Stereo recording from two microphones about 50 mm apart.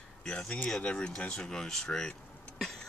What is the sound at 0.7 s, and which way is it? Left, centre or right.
Speech, centre.